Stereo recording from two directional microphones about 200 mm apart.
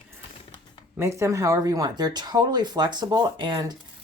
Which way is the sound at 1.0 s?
15° right (ahead or behind).